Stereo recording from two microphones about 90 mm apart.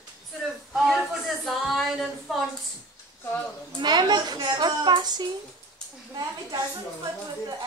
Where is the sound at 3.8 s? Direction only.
55° right (ahead or behind).